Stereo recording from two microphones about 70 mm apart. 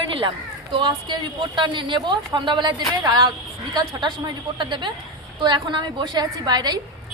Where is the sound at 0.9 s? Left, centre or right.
Right.